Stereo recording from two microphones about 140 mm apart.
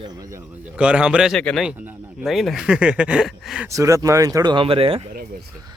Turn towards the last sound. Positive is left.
turn(degrees=-40)  # may be behind; listen again after turning